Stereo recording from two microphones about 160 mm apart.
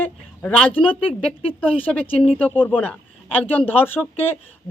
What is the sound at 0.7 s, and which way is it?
Speech, 35° left (ahead or behind).